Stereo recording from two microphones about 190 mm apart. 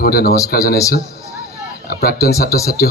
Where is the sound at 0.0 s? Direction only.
50° left (ahead or behind).